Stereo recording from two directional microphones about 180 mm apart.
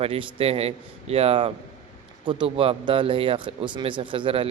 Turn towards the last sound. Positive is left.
turn(degrees=-30)  # may be behind; listen again after turning